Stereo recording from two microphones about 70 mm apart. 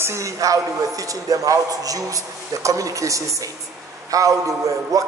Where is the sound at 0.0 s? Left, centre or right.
Right.